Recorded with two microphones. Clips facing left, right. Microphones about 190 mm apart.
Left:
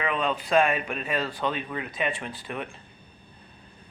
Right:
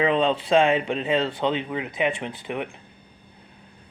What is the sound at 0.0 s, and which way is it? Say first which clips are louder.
Speech: right 7 dB; 25° right (ahead or behind).